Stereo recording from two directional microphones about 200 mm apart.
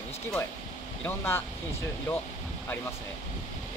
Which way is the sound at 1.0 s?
10° left (ahead or behind).